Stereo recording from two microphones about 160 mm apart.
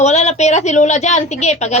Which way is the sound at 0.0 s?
45° left (ahead or behind).